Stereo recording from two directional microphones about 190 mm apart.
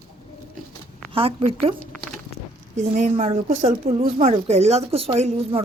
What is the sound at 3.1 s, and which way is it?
A woman's voice, 30° right (ahead or behind).